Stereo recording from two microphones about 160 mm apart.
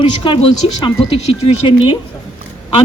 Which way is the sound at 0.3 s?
35° left (ahead or behind).